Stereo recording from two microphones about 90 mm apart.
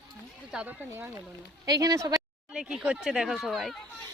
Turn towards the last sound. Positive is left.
turn(degrees=-5)  # may be behind; listen again after turning